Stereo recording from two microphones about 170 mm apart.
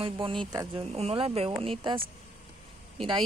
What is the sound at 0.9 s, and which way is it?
Speech, 35° right (ahead or behind).